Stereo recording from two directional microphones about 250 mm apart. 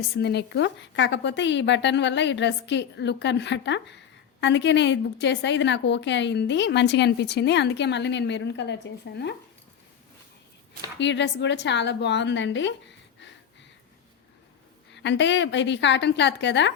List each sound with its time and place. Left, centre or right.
0.2 s a woman's voice: left
10.9 s a woman's voice: left
14.9 s a woman's voice: left